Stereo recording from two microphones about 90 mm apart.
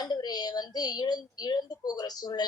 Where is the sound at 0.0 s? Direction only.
50° left (ahead or behind).